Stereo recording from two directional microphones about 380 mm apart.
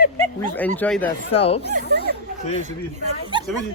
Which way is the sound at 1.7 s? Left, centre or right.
Right.